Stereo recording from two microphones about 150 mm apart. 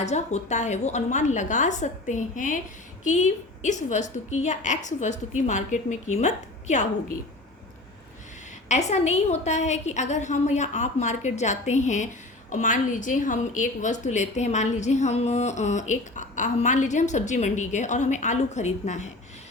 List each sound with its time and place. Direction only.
0.0 s a woman's voice: 50° left (ahead or behind)
8.7 s a woman's voice: 50° left (ahead or behind)